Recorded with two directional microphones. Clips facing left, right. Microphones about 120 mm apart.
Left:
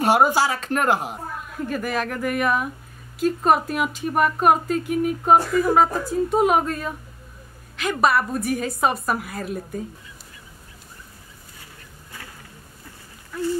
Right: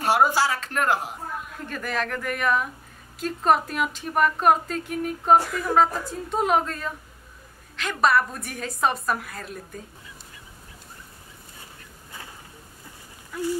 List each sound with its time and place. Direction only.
0.0 s speech: 15° left (ahead or behind)
1.7 s speech: 10° left (ahead or behind)
13.3 s a sound: 10° right (ahead or behind)